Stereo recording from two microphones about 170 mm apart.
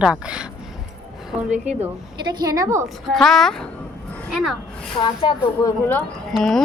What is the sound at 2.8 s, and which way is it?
Speech, centre (ahead or behind).